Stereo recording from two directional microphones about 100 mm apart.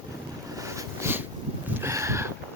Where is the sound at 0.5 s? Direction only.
30° right (ahead or behind).